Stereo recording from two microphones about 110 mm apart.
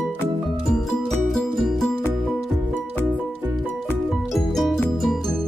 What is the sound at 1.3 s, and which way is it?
Music, centre (ahead or behind).